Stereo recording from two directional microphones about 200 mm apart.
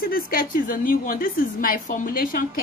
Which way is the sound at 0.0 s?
45° left (ahead or behind).